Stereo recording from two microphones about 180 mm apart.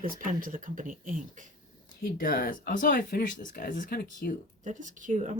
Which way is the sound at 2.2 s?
55° left (ahead or behind).